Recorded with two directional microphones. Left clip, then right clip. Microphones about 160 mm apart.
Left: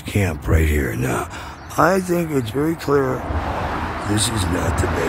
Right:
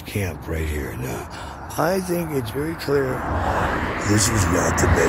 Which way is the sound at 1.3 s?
45° left (ahead or behind).